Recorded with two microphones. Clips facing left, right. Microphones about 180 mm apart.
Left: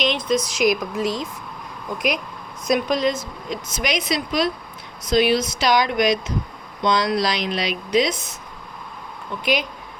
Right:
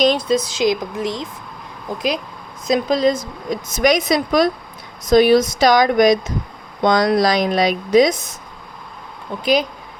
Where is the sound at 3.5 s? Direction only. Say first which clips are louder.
Right 9 dB; 45° right (ahead or behind).